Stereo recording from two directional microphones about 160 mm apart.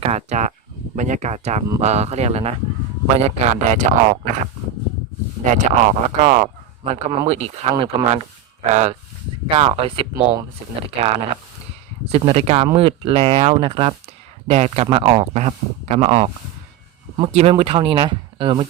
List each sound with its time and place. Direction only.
0.0 s speech: 45° right (ahead or behind)
5.5 s speech: 50° right (ahead or behind)
17.3 s speech: 40° right (ahead or behind)